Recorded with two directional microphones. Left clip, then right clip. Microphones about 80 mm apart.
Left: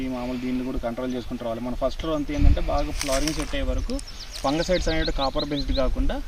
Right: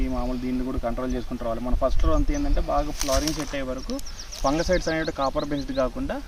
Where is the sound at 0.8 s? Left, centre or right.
Centre.